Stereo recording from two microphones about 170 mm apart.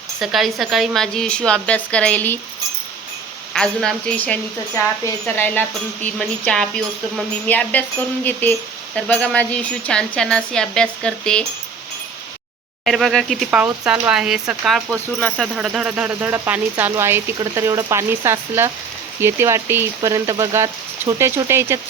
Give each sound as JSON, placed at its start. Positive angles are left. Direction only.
{"t": 0.2, "sound": "a woman's voice", "side_deg": 0}
{"t": 3.5, "sound": "a woman's voice", "side_deg": 5}
{"t": 12.8, "sound": "a woman's voice", "side_deg": 0}